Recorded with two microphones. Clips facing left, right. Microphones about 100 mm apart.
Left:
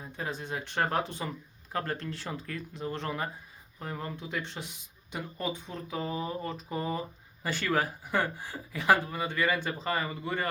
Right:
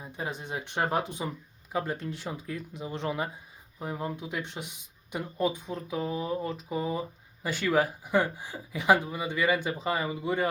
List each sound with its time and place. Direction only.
0.0 s speech: 15° right (ahead or behind)